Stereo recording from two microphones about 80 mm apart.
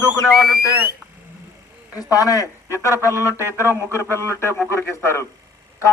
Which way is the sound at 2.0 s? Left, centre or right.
Left.